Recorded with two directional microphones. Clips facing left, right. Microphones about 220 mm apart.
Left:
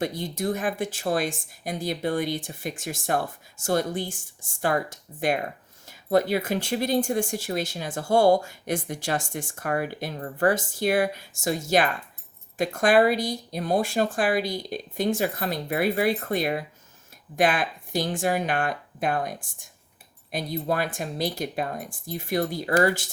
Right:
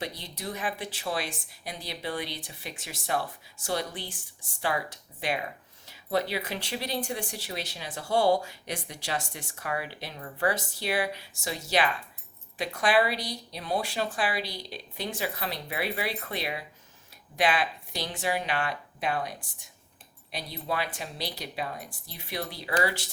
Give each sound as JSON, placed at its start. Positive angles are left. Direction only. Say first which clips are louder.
{"t": 0.0, "sound": "speech", "louder": "left 9 dB", "side_deg": 50}